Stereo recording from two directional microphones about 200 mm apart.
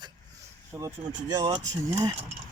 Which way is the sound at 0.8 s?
15° right (ahead or behind).